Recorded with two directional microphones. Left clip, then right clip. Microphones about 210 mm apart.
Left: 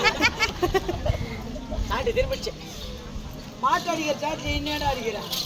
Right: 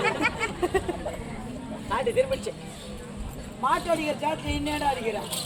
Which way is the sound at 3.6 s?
15° right (ahead or behind).